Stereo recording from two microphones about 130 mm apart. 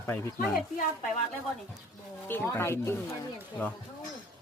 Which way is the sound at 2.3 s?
15° left (ahead or behind).